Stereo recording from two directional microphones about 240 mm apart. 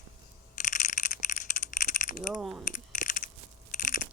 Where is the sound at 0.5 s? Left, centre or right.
Left.